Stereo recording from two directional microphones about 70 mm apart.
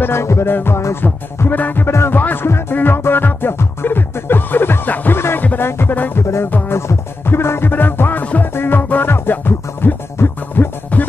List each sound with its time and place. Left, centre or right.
0.0 s music: left
6.2 s music: left